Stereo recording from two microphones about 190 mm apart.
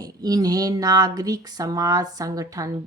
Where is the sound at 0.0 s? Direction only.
20° right (ahead or behind).